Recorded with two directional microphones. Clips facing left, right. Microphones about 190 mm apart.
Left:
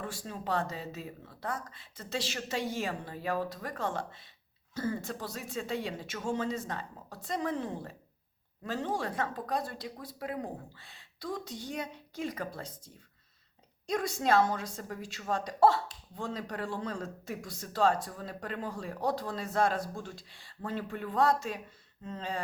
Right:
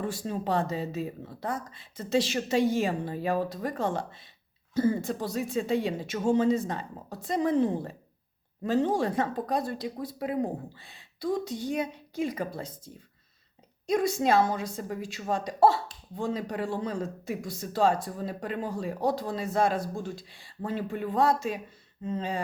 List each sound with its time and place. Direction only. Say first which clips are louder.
0.0 s speech: right 7 dB; 20° right (ahead or behind)